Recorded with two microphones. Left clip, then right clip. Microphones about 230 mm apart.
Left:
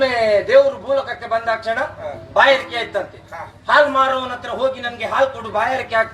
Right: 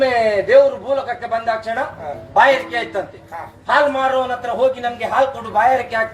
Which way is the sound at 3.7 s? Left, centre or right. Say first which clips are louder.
Left 2 dB; left.